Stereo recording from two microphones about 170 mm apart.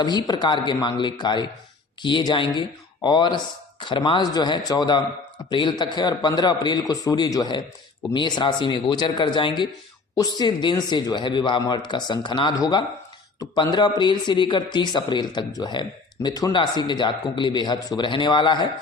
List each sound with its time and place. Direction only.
0.0 s speech: 25° left (ahead or behind)